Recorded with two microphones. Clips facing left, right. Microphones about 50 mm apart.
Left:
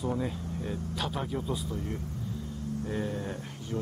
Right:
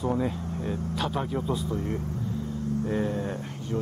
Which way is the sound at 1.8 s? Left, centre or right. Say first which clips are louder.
Right 5 dB; right.